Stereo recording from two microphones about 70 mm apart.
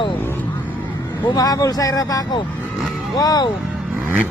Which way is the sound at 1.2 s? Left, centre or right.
Left.